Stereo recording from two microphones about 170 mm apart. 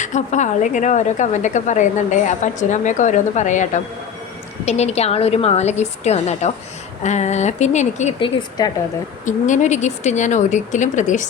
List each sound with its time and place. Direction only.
0.0 s a woman's voice: 45° left (ahead or behind)
8.2 s speech: 25° left (ahead or behind)
9.2 s speech: 45° left (ahead or behind)